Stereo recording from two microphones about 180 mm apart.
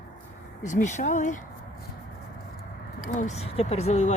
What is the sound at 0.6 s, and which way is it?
Speech, 45° left (ahead or behind).